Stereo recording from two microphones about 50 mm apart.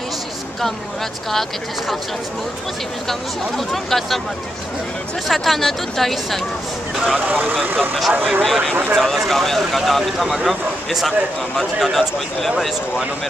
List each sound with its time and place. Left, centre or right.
3.1 s speech: centre
5.3 s speech: centre
7.2 s speech: right
8.9 s speech: centre